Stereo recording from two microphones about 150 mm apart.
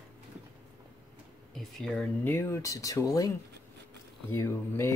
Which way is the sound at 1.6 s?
5° left (ahead or behind).